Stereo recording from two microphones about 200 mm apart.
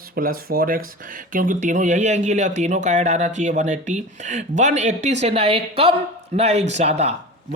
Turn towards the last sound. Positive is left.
turn(degrees=-35)  # may be behind; listen again after turning